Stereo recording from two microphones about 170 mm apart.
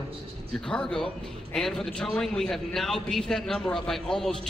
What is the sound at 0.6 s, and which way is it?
A man's voice, 5° left (ahead or behind).